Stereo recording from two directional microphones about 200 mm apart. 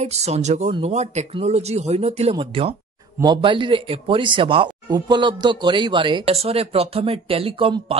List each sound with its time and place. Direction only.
0.0 s speech: 35° right (ahead or behind)